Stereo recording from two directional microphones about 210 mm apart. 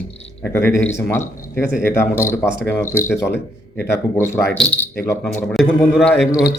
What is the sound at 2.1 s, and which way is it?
Speech, 10° left (ahead or behind).